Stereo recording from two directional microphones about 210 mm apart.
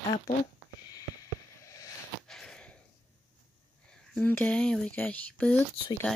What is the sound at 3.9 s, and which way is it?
Speech, 5° left (ahead or behind).